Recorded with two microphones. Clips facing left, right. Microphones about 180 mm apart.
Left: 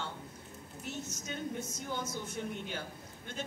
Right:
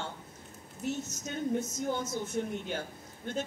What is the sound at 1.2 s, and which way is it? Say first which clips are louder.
Speech: right 8 dB; 45° right (ahead or behind).